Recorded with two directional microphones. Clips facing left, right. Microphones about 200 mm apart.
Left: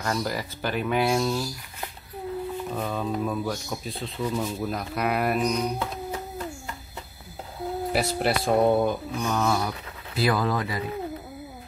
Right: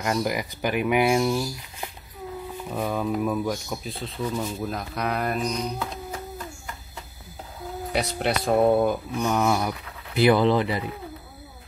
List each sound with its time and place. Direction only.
0.0 s speech: 15° right (ahead or behind); by 5.9 s 5° left (ahead or behind)
7.9 s speech: 5° left (ahead or behind)
9.3 s speech: 15° right (ahead or behind)